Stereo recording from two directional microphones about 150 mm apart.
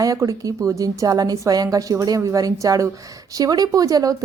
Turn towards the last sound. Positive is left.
turn(degrees=-25)  # may be behind; listen again after turning